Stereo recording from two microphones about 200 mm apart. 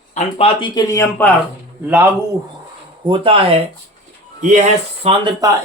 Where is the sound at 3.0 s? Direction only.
25° right (ahead or behind).